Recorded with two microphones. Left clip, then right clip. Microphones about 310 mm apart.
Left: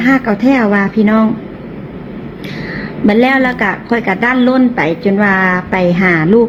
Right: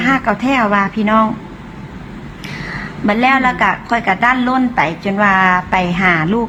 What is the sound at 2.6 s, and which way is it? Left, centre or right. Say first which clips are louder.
A woman's voice: left 3 dB; right.